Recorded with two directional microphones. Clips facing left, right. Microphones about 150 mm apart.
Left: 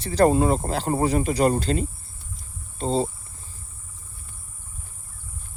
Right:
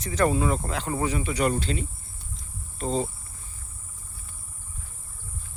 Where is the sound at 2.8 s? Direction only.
30° left (ahead or behind).